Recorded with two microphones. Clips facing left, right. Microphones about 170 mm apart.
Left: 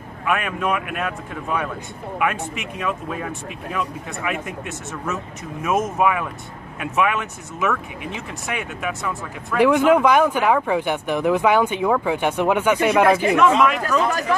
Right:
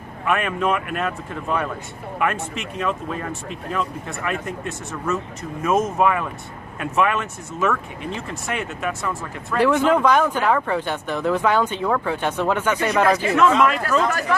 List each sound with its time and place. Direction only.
0.3 s speech: centre (ahead or behind)
9.6 s speech: 10° left (ahead or behind)